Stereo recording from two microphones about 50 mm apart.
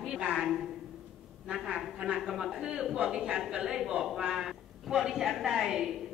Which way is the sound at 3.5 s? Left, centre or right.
Centre.